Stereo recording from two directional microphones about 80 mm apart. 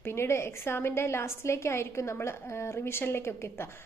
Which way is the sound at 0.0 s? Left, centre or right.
Left.